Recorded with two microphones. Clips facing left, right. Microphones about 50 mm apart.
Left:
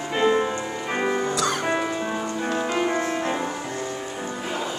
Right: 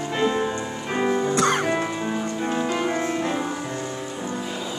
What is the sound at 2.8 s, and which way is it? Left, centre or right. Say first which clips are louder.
Music: even; centre.